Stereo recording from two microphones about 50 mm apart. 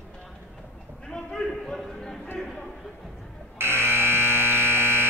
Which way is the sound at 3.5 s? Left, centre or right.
Right.